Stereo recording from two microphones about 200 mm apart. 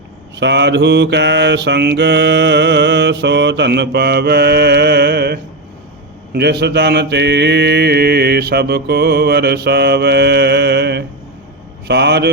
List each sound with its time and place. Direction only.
0.3 s mantra: 60° right (ahead or behind)